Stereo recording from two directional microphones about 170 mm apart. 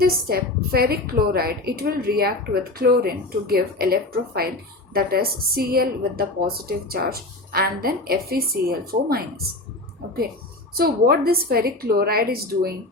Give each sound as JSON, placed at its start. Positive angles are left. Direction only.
{"t": 0.0, "sound": "a woman's voice", "side_deg": -60}
{"t": 10.8, "sound": "a woman's voice", "side_deg": -65}